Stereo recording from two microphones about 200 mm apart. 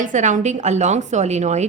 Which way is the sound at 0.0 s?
40° right (ahead or behind).